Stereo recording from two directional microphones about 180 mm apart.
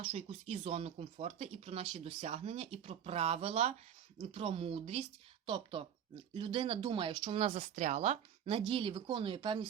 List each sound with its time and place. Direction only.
0.0 s speech: 35° right (ahead or behind)